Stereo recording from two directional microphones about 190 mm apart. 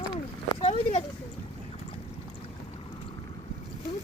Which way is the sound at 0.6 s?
35° left (ahead or behind).